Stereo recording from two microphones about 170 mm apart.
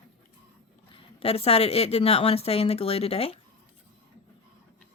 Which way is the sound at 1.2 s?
35° left (ahead or behind).